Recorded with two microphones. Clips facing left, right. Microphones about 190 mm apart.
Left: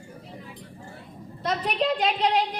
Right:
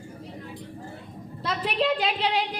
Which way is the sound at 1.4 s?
40° left (ahead or behind).